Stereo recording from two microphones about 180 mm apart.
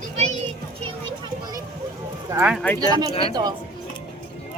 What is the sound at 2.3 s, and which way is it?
Speech, 5° right (ahead or behind).